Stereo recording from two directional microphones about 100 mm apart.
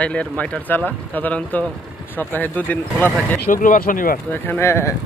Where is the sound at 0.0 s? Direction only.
15° left (ahead or behind).